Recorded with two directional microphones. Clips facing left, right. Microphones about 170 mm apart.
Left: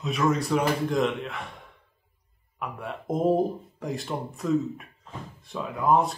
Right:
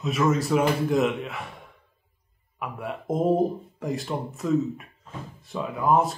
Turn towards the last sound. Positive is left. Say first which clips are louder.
# right 1 dB
turn(degrees=0)  # may be behind; listen again after turning